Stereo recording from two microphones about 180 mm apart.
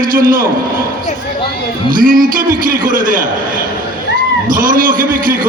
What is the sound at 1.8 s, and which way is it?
A man's voice, 50° right (ahead or behind).